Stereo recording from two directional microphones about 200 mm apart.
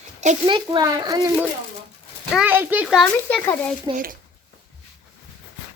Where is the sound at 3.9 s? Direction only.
45° right (ahead or behind).